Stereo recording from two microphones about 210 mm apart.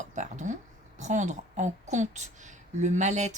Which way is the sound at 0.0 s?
35° right (ahead or behind).